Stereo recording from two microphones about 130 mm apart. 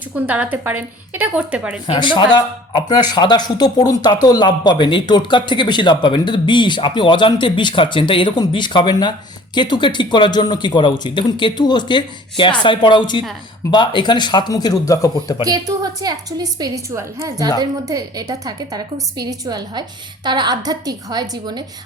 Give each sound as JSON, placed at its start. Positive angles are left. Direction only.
{"t": 0.3, "sound": "a woman's voice", "side_deg": -15}
{"t": 1.9, "sound": "speech", "side_deg": 40}
{"t": 15.4, "sound": "a woman's voice", "side_deg": -30}